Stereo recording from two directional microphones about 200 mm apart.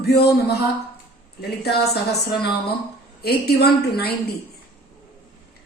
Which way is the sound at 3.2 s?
50° left (ahead or behind).